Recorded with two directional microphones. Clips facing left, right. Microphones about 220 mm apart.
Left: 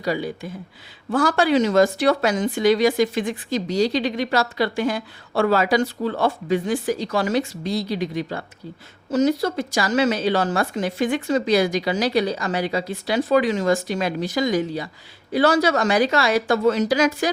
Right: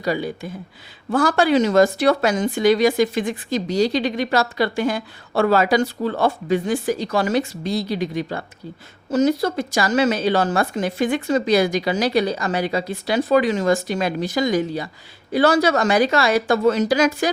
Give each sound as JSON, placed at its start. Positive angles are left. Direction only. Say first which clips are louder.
{"t": 0.0, "sound": "speech", "louder": "right 1 dB", "side_deg": -50}